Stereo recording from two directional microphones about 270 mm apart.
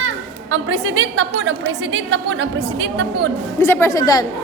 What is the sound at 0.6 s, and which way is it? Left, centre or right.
Speech, right.